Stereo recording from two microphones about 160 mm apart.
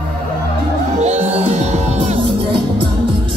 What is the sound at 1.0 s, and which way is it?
Music, 45° right (ahead or behind).